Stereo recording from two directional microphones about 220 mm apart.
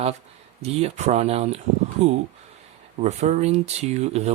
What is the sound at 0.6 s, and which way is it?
Speech, 30° right (ahead or behind).